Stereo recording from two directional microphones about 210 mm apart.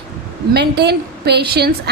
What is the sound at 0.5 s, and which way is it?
Speech, 50° right (ahead or behind).